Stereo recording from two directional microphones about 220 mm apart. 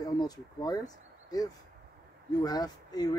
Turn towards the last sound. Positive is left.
turn(degrees=20)  # may be behind; listen again after turning